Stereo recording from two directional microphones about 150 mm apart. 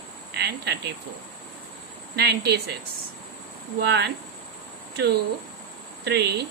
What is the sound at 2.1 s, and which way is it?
Speech, 90° right.